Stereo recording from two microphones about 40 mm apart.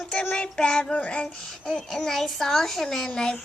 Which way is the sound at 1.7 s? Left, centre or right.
Centre.